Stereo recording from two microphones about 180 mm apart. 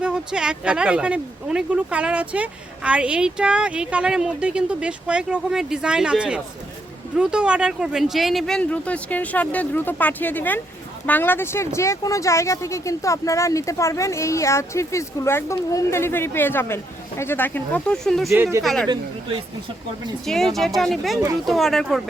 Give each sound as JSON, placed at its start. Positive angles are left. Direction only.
{"t": 0.0, "sound": "speech", "side_deg": -5}
{"t": 20.2, "sound": "speech", "side_deg": 0}